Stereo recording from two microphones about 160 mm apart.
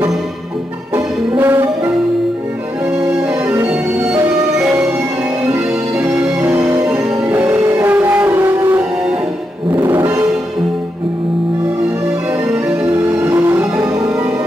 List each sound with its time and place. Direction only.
0.9 s music: 15° right (ahead or behind)
3.0 s music: 15° right (ahead or behind)
5.4 s music: 15° right (ahead or behind)
12.6 s music: 15° right (ahead or behind)